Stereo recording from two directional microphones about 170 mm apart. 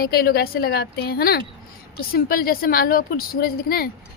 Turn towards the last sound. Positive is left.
turn(degrees=60)  # may be behind; listen again after turning